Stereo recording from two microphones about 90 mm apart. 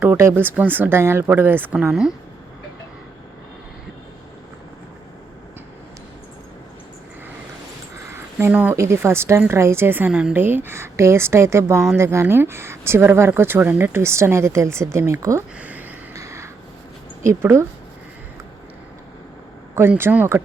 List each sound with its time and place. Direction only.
0.2 s speech: 25° right (ahead or behind)
1.9 s a woman's voice: 5° right (ahead or behind)
8.1 s a sound: 25° right (ahead or behind)
8.7 s speech: 30° right (ahead or behind)
10.1 s a woman's voice: 10° right (ahead or behind)
10.3 s speech: 25° right (ahead or behind)
15.5 s a sound: 15° right (ahead or behind)
16.1 s a sound: 35° right (ahead or behind)
17.2 s speech: 30° right (ahead or behind)
20.0 s speech: 25° right (ahead or behind)